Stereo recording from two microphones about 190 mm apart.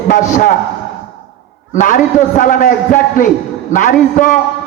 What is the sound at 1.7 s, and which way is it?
A man's voice, 45° left (ahead or behind).